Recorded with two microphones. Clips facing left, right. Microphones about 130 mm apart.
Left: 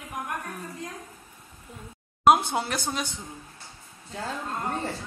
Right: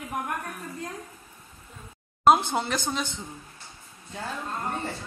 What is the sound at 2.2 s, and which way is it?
Speech, 10° left (ahead or behind).